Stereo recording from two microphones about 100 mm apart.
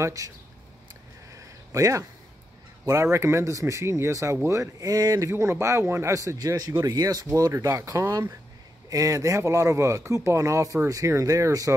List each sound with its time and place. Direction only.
0.0 s speech: 35° right (ahead or behind)
1.3 s a sound: 30° right (ahead or behind)
2.8 s speech: 30° right (ahead or behind)
5.3 s speech: 25° right (ahead or behind)